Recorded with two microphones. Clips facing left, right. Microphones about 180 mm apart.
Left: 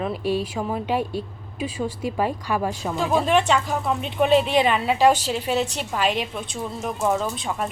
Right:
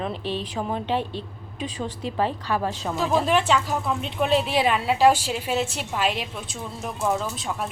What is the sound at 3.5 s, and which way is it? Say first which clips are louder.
Speech: left 1 dB; centre (ahead or behind).